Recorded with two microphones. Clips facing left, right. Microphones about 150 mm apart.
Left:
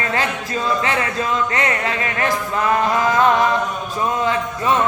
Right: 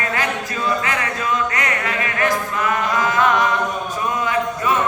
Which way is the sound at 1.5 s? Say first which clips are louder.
Left 2 dB; 30° left (ahead or behind).